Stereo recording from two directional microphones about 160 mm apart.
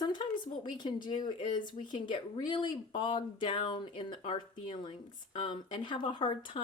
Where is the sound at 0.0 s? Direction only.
30° left (ahead or behind).